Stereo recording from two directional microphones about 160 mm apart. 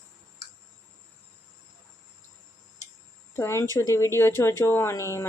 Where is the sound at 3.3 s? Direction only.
15° left (ahead or behind).